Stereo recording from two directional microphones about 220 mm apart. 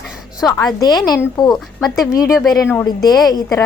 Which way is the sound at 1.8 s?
Centre (ahead or behind).